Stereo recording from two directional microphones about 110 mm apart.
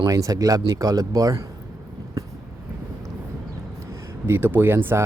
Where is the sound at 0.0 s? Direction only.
30° right (ahead or behind).